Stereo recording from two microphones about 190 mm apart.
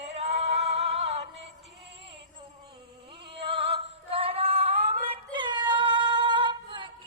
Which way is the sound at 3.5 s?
30° right (ahead or behind).